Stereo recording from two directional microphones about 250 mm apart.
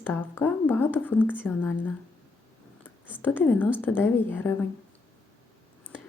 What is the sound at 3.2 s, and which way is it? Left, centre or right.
Speech, centre.